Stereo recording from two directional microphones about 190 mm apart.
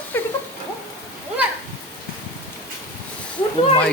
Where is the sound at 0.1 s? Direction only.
10° left (ahead or behind).